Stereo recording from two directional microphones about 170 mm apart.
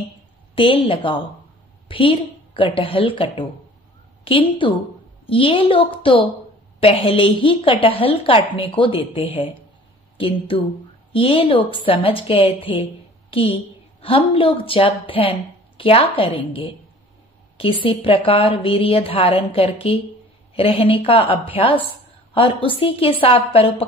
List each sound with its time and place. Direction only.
0.6 s a woman's voice: 30° left (ahead or behind)